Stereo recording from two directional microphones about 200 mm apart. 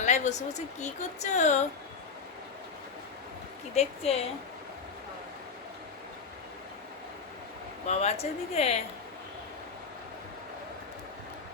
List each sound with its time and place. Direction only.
0.0 s a woman's voice: 35° left (ahead or behind)
3.8 s a woman's voice: 30° left (ahead or behind)
7.9 s a woman's voice: 30° left (ahead or behind)